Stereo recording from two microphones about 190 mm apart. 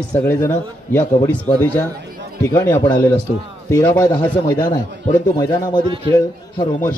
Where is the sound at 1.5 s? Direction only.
35° left (ahead or behind).